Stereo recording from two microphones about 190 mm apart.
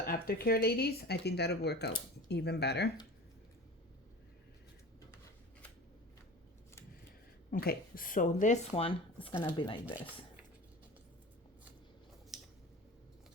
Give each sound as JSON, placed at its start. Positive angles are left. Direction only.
{"t": 0.0, "sound": "speech", "side_deg": 50}
{"t": 7.5, "sound": "speech", "side_deg": 50}
{"t": 12.3, "sound": "squish", "side_deg": 0}